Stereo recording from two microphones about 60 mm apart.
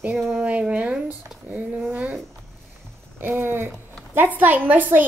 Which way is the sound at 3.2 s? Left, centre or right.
Right.